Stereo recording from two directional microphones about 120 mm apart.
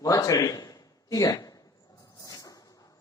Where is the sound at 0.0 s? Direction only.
30° left (ahead or behind).